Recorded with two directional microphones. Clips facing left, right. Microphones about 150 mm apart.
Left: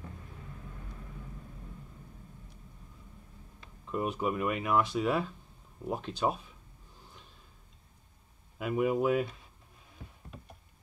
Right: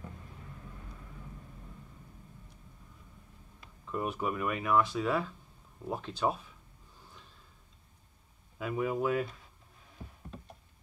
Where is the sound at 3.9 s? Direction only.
20° left (ahead or behind).